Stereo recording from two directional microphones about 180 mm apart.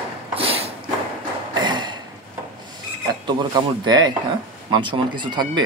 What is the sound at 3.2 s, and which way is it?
Speech, 25° right (ahead or behind).